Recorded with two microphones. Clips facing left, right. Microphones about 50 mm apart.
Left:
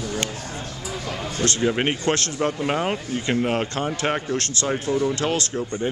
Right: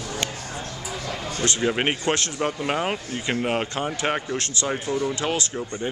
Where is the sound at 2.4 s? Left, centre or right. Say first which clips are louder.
Left 2 dB; centre.